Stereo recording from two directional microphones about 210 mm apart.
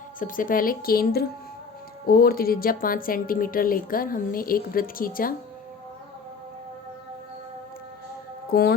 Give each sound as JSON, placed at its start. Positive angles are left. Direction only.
{"t": 0.2, "sound": "a woman's voice", "side_deg": 40}
{"t": 8.4, "sound": "speech", "side_deg": 45}